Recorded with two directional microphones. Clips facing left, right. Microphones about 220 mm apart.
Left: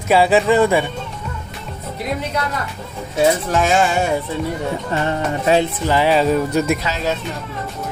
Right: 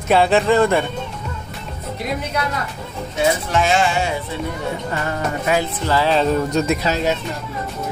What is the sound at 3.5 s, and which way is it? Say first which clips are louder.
Speech: left 1 dB; 45° left (ahead or behind).